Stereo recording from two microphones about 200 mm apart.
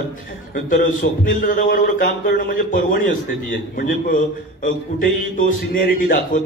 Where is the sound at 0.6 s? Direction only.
45° left (ahead or behind).